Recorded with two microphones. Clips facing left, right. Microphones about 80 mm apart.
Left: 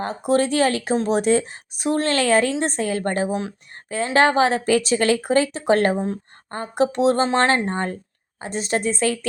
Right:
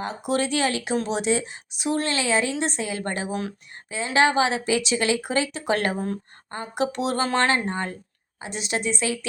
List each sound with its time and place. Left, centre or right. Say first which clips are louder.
0.0 s a woman's voice: left 5 dB; left